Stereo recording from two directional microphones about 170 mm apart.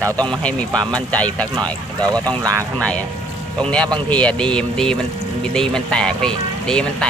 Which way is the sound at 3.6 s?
5° left (ahead or behind).